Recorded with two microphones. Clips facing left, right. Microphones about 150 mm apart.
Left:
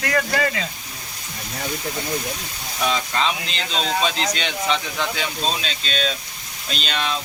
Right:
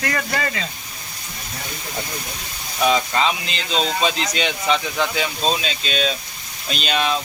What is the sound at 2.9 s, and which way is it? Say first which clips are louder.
Speech: right 4 dB; 5° right (ahead or behind).